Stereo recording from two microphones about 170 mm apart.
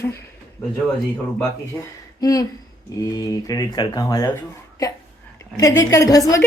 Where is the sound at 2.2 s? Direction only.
20° left (ahead or behind).